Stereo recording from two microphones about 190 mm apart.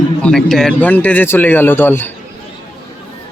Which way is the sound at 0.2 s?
5° left (ahead or behind).